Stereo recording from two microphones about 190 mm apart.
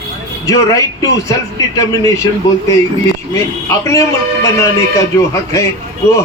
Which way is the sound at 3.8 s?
15° left (ahead or behind).